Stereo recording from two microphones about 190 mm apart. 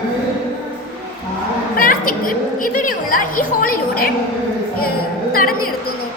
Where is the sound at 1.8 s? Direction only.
45° left (ahead or behind).